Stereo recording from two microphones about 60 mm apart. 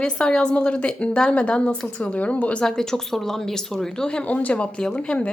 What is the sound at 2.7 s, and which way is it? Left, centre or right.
Speech, centre.